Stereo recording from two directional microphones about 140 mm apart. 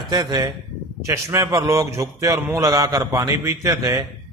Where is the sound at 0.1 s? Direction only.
30° right (ahead or behind).